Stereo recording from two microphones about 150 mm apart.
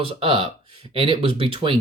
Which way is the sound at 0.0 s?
35° right (ahead or behind).